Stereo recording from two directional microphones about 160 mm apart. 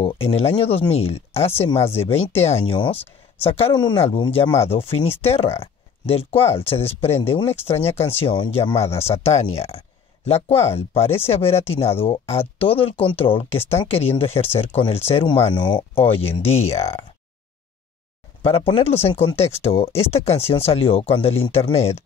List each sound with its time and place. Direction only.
0.0 s speech: 35° left (ahead or behind)
18.7 s speech: 35° left (ahead or behind)